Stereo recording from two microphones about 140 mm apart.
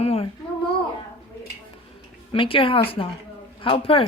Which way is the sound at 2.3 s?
40° left (ahead or behind).